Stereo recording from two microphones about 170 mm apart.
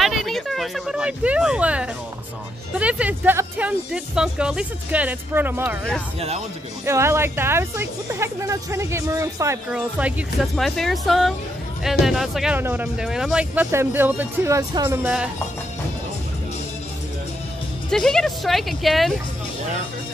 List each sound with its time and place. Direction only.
0.0 s a sound: centre (ahead or behind)
2.7 s speech: 10° right (ahead or behind)
6.1 s speech: 35° right (ahead or behind)
6.9 s speech: 15° right (ahead or behind)
9.7 s speech: 5° right (ahead or behind)
17.8 s speech: 5° left (ahead or behind)